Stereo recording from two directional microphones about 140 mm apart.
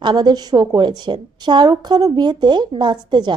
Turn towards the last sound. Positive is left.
turn(degrees=-30)  # may be behind; listen again after turning